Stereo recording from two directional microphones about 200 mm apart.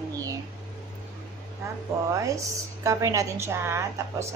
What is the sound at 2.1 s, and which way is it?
A woman's voice, 15° right (ahead or behind).